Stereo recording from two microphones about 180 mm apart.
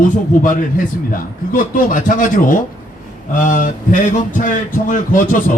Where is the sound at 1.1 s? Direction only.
50° left (ahead or behind).